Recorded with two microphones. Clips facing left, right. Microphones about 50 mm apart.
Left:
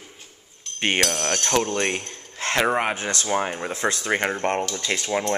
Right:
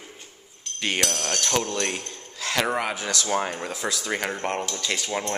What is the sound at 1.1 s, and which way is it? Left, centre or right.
Speech, centre.